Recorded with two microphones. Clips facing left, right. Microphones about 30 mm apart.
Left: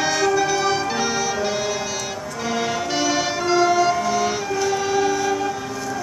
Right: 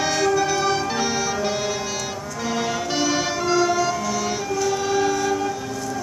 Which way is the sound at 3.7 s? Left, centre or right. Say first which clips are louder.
Left 4 dB; left.